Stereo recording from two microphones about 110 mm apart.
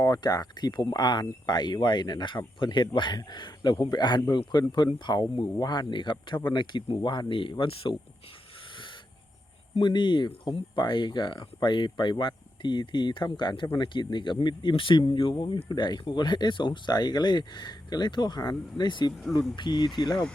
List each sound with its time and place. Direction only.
0.0 s speech: 40° left (ahead or behind); by 7.9 s 55° left (ahead or behind)
9.7 s speech: 45° left (ahead or behind)